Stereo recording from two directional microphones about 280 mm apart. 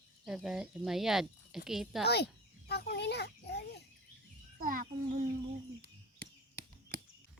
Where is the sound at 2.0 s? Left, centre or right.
Left.